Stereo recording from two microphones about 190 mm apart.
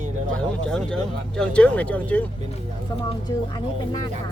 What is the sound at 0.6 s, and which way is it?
Speech, 5° left (ahead or behind).